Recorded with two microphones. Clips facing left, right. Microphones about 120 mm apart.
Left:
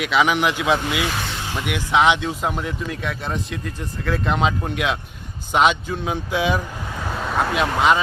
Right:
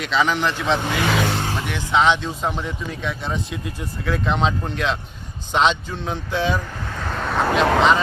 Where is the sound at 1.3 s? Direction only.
55° right (ahead or behind).